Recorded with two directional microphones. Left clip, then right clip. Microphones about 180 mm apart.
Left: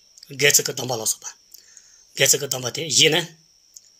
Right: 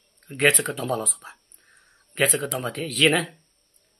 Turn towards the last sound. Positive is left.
turn(degrees=40)  # may be behind; listen again after turning